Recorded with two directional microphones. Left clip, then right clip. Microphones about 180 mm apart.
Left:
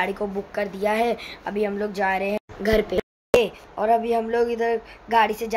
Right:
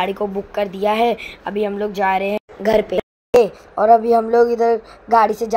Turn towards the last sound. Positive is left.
turn(degrees=-15)  # may be behind; listen again after turning